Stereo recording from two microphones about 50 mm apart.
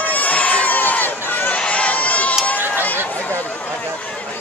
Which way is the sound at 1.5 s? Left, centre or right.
Left.